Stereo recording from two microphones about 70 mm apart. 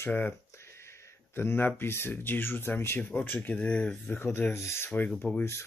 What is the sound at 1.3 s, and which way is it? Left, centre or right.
Speech, left.